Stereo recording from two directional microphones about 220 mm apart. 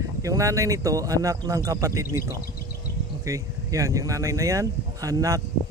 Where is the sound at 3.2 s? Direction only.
15° right (ahead or behind).